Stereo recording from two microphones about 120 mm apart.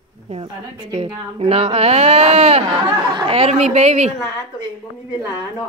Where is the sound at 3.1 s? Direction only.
40° right (ahead or behind).